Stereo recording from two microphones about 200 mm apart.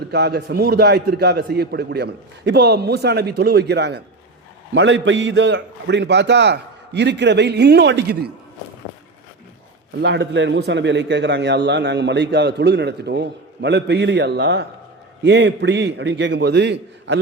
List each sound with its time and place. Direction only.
0.1 s a man's voice: 55° right (ahead or behind)
4.7 s a man's voice: 70° right (ahead or behind)
10.0 s a man's voice: 60° right (ahead or behind)